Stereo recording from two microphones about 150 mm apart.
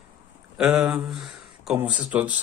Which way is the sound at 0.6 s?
5° right (ahead or behind).